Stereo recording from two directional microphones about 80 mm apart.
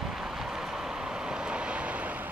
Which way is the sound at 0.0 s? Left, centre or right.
Centre.